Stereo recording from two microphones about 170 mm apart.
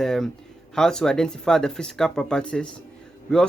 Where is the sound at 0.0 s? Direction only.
Centre (ahead or behind).